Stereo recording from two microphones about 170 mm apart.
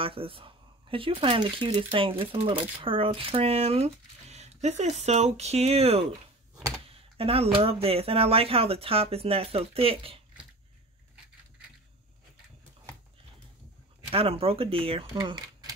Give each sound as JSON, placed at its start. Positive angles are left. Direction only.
{"t": 0.0, "sound": "speech", "side_deg": -30}
{"t": 14.1, "sound": "speech", "side_deg": -35}